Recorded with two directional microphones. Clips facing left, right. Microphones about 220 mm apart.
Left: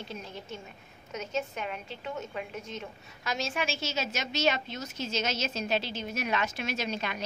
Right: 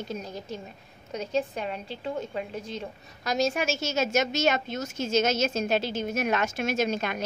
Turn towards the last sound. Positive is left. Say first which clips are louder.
# right 6 dB
turn(degrees=-50)  # may be behind; listen again after turning